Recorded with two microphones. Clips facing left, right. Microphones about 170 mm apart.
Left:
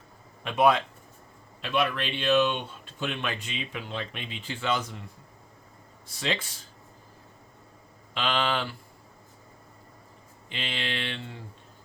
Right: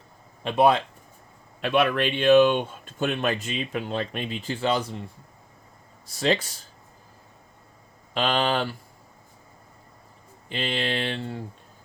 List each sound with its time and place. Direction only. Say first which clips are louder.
0.4 s mantra: right 3 dB; 30° right (ahead or behind)
1.6 s speech: right 6 dB; 55° right (ahead or behind); by 4.9 s 35° right (ahead or behind)
6.1 s mantra: right 7 dB; 40° right (ahead or behind)
8.1 s mantra: right 4 dB; 40° right (ahead or behind)
10.5 s mantra: right 7 dB; 40° right (ahead or behind)